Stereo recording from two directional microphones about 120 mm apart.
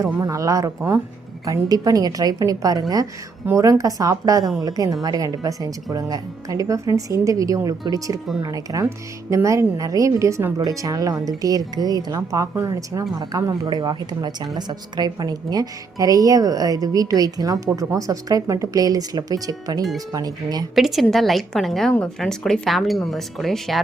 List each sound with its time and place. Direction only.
0.2 s a woman's voice: 30° right (ahead or behind)
20.7 s speech: centre (ahead or behind)